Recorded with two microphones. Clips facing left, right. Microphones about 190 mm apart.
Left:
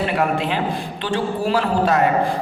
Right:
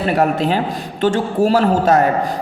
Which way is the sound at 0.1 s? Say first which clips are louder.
Right 4 dB; 40° right (ahead or behind).